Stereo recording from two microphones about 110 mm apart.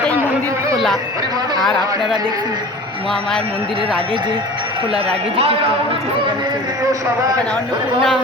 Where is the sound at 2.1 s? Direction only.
40° right (ahead or behind).